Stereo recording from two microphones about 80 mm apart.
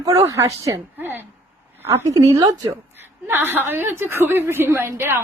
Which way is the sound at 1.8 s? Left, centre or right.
Right.